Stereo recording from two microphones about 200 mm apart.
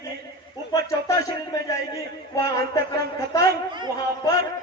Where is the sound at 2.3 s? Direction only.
15° left (ahead or behind).